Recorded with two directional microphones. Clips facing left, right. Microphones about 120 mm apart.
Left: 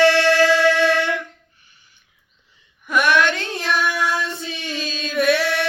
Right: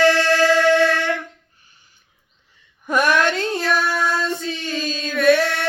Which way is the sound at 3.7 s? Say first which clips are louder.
Left 1 dB; 40° right (ahead or behind).